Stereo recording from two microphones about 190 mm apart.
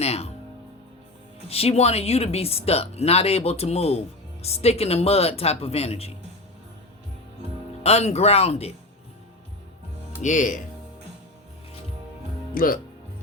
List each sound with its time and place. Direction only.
0.0 s speech: 35° left (ahead or behind)
1.5 s speech: 30° left (ahead or behind)
7.9 s speech: 35° left (ahead or behind)
10.2 s speech: 40° left (ahead or behind)
12.5 s speech: 50° left (ahead or behind)